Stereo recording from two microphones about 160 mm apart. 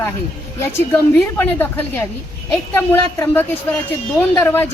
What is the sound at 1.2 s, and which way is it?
A woman's voice, 15° left (ahead or behind).